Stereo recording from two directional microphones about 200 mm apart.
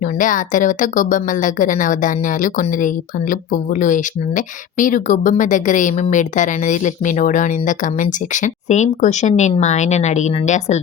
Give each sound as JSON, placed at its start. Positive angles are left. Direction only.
{"t": 0.0, "sound": "a woman's voice", "side_deg": 40}